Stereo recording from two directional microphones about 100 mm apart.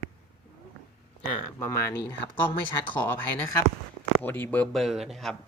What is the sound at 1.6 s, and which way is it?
Speech, 25° left (ahead or behind).